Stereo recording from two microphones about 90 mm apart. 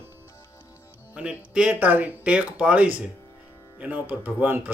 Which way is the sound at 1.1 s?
15° right (ahead or behind).